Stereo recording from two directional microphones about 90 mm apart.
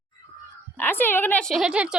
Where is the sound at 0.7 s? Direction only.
20° left (ahead or behind).